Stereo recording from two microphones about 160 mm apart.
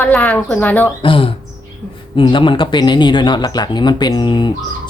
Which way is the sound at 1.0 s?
35° left (ahead or behind).